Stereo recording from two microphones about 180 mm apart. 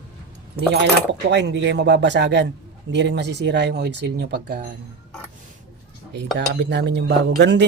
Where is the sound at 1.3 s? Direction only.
75° right (ahead or behind).